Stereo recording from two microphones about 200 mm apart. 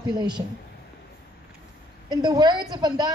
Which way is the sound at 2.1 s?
20° right (ahead or behind).